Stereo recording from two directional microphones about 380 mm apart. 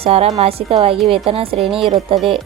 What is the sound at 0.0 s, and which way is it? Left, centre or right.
Speech, centre.